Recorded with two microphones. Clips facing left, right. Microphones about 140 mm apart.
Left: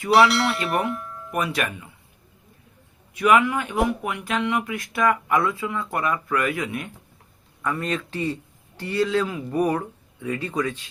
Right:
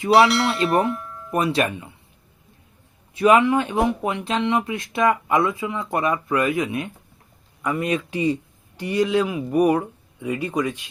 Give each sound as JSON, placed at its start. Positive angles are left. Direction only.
{"t": 0.1, "sound": "a sound", "side_deg": 0}
{"t": 1.3, "sound": "speech", "side_deg": -30}
{"t": 3.2, "sound": "speech", "side_deg": -30}